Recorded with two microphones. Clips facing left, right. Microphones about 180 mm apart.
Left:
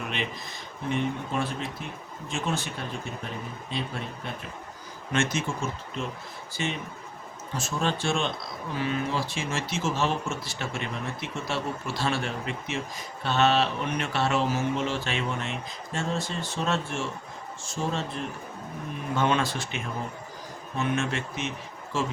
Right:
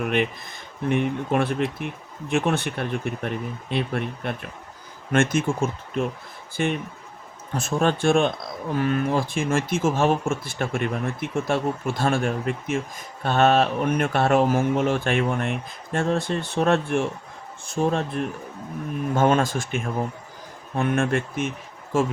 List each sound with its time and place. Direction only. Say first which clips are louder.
0.0 s speech: right 9 dB; 55° right (ahead or behind)
19.1 s speech: right 5 dB; 45° right (ahead or behind)